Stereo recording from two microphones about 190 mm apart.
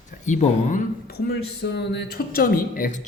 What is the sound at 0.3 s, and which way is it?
A man's voice, 40° left (ahead or behind).